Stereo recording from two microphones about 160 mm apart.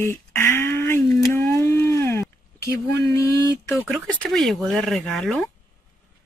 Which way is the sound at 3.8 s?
Centre (ahead or behind).